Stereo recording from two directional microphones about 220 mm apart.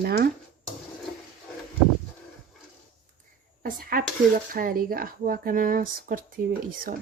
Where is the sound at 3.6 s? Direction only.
40° right (ahead or behind).